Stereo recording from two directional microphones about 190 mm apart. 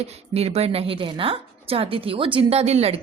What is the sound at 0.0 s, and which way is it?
A woman's voice, 35° right (ahead or behind).